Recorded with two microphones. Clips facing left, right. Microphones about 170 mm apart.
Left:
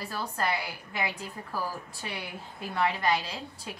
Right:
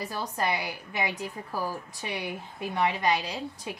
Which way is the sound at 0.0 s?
20° right (ahead or behind).